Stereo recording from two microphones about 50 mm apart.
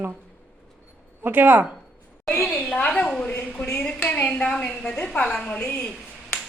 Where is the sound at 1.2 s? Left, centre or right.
Right.